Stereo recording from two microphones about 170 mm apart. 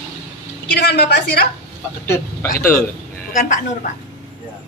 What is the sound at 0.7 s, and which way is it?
Speech, 75° left (ahead or behind).